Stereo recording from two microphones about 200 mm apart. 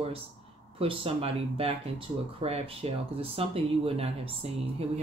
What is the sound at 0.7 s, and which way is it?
Speech, 30° right (ahead or behind).